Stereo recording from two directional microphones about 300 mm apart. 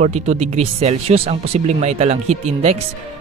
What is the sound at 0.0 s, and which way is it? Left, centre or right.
Speech, right.